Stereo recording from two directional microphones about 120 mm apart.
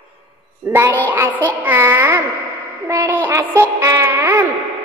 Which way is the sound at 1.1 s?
15° right (ahead or behind).